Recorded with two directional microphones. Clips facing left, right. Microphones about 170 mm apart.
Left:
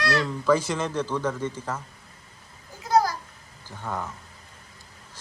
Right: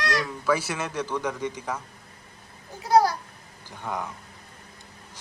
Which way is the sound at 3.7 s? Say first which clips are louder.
Even; 15° right (ahead or behind).